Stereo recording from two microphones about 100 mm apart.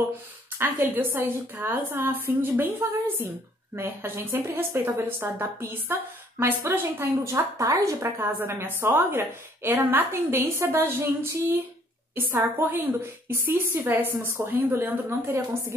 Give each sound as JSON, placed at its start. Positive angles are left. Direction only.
{"t": 0.6, "sound": "a woman's voice", "side_deg": -20}